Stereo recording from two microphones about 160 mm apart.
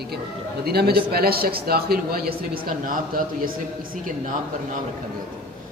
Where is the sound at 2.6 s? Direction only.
60° right (ahead or behind).